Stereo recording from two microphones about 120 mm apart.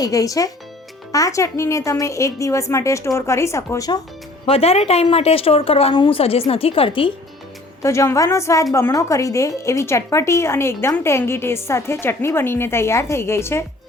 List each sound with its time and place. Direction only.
0.0 s speech: 30° left (ahead or behind)
4.4 s speech: 55° left (ahead or behind)
7.8 s speech: 25° left (ahead or behind)